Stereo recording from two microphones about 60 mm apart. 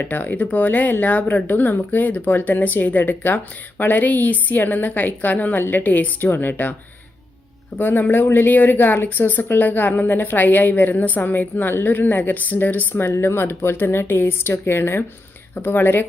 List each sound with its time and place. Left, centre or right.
0.0 s speech: left
7.8 s speech: left
12.9 s speech: left